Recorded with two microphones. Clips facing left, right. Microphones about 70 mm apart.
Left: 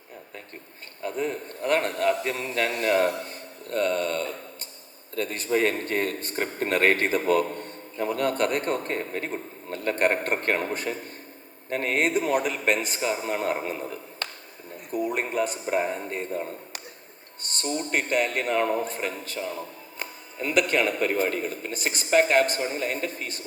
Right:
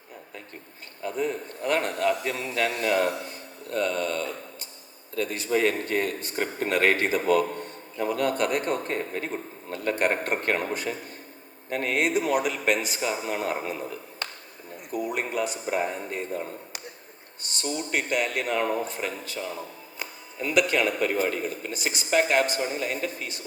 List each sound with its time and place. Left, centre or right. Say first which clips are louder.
1.0 s a man's voice: even; left
14.9 s a man's voice: left 2 dB; left
17.4 s a man's voice: left 1 dB; left